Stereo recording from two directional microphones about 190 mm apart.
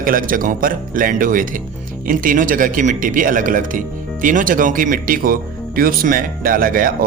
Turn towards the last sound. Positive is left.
turn(degrees=-50)  # may be behind; listen again after turning